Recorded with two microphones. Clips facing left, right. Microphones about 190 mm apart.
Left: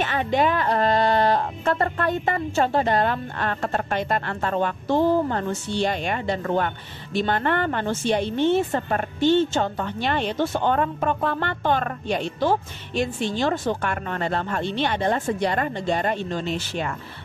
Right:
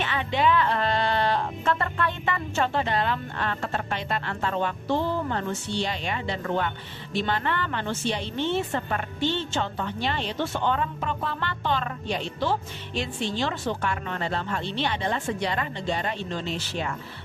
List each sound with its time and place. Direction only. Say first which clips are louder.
0.0 s a woman's voice: left 3 dB; 45° left (ahead or behind)